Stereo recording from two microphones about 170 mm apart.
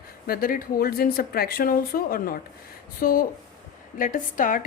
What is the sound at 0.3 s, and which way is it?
A woman's voice, 60° left (ahead or behind).